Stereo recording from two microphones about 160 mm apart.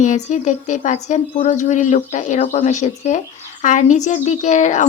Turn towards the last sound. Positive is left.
turn(degrees=50)  # may be behind; listen again after turning